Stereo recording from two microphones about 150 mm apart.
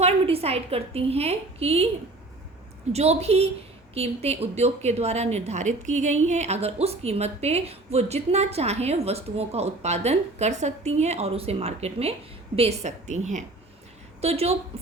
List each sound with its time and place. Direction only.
0.0 s a woman's voice: 40° right (ahead or behind)
2.9 s a woman's voice: 45° right (ahead or behind)